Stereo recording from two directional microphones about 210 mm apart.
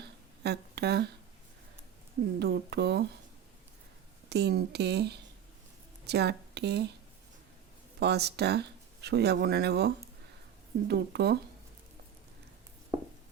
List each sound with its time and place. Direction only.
0.0 s a sound: 50° right (ahead or behind)
2.4 s speech: 55° right (ahead or behind)
4.3 s speech: 50° right (ahead or behind)
7.9 s speech: 50° right (ahead or behind)